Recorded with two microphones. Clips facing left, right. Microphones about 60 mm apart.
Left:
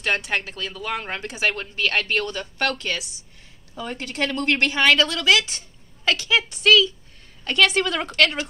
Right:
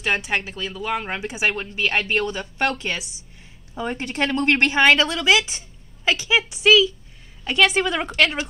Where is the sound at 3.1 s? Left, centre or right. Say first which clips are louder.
Right 1 dB; centre.